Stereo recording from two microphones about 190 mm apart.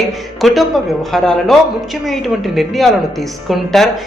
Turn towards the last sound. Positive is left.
turn(degrees=0)  # may be behind; listen again after turning